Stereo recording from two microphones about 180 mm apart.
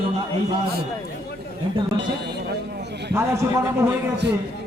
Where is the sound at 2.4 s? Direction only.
65° right (ahead or behind).